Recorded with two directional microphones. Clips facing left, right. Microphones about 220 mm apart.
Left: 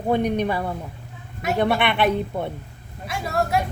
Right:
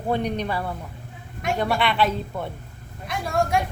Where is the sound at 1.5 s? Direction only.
25° left (ahead or behind).